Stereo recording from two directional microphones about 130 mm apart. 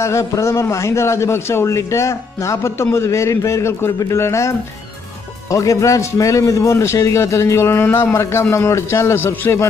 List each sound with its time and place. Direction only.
0.0 s a man's voice: 25° left (ahead or behind)